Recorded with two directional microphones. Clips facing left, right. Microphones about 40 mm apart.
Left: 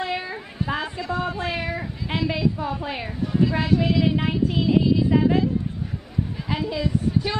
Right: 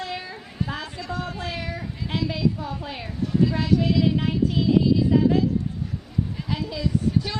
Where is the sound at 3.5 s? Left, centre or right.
Left.